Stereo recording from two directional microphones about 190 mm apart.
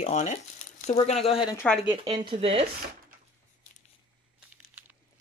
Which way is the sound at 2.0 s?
25° right (ahead or behind).